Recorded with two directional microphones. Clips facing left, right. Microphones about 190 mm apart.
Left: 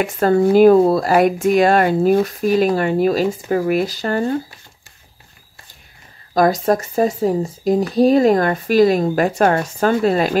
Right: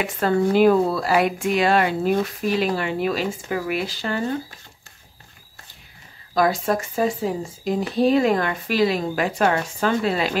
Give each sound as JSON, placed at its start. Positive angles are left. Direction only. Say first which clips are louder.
{"t": 0.0, "sound": "speech", "louder": "left 5 dB", "side_deg": 45}
{"t": 6.3, "sound": "speech", "louder": "left 5 dB", "side_deg": 40}